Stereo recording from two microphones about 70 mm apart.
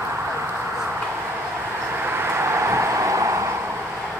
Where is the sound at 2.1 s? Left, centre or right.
Right.